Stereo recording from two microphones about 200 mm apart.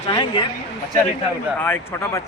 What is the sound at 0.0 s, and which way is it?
Speech, 25° left (ahead or behind).